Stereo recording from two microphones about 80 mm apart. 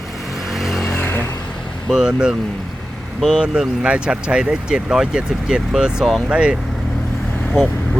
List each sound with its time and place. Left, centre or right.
0.5 s vehicle: centre
0.9 s vehicle: left
1.9 s speech: centre